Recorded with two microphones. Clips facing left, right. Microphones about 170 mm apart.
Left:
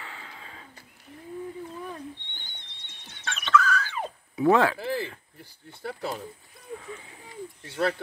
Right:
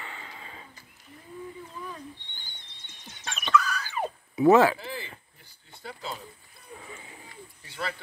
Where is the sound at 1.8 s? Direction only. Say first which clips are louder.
Left 3 dB; 60° left (ahead or behind).